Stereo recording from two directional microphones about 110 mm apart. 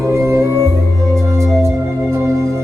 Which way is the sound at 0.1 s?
25° right (ahead or behind).